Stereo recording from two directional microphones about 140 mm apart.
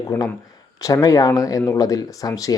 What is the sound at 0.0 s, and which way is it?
Speech, 25° left (ahead or behind).